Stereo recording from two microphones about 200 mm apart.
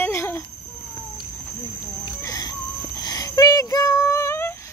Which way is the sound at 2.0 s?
20° left (ahead or behind).